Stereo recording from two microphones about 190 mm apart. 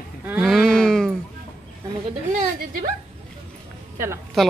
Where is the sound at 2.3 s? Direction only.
45° right (ahead or behind).